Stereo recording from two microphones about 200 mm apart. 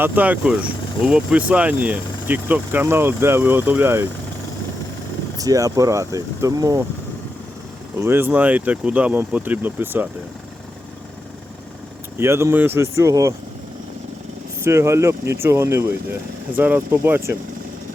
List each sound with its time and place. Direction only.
0.0 s speech: 10° right (ahead or behind)
5.4 s speech: 15° right (ahead or behind)
7.9 s speech: 10° right (ahead or behind)
12.1 s speech: 15° right (ahead or behind)
14.6 s speech: 15° right (ahead or behind)